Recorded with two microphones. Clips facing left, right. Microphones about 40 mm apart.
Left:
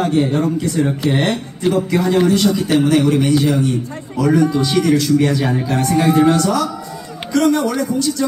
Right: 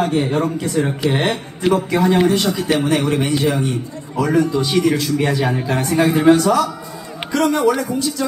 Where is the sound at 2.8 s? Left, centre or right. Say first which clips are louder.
Left 4 dB; centre.